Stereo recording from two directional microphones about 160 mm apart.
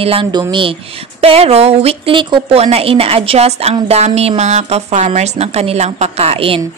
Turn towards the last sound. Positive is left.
turn(degrees=-40)  # may be behind; listen again after turning